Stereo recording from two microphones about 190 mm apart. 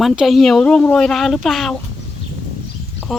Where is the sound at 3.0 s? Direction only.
Centre (ahead or behind).